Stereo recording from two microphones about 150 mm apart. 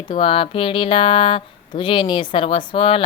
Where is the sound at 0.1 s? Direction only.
40° left (ahead or behind).